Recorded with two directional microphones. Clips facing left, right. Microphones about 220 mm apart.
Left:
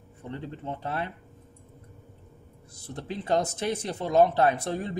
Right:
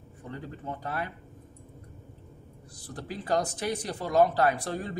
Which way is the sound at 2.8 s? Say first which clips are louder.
Left 3 dB; 25° left (ahead or behind).